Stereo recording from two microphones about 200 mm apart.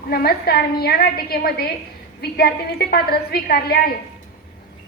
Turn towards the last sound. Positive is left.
turn(degrees=50)  # may be behind; listen again after turning